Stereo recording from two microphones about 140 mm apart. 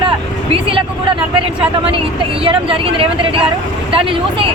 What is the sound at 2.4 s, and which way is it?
Speech, 40° right (ahead or behind).